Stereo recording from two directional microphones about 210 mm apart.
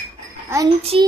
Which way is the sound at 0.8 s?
25° right (ahead or behind).